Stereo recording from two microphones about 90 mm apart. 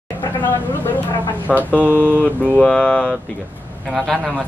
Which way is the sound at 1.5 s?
20° right (ahead or behind).